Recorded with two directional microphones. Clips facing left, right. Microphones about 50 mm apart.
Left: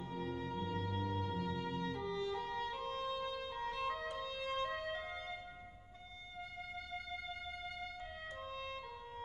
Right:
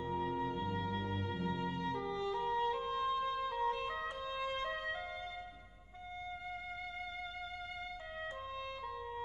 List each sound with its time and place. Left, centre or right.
0.0 s music: right